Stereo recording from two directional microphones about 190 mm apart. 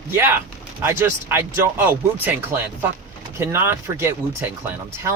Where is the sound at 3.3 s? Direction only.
15° right (ahead or behind).